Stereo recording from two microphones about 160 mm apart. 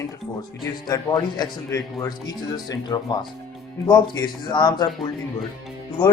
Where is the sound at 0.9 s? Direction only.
25° left (ahead or behind).